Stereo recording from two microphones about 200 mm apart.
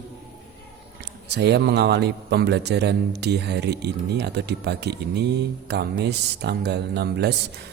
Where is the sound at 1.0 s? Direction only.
55° right (ahead or behind).